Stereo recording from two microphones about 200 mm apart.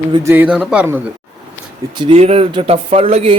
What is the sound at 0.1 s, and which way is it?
Speech, 10° right (ahead or behind).